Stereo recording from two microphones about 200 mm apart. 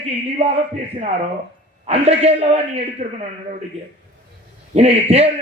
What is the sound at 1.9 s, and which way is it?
A man's voice, 30° right (ahead or behind).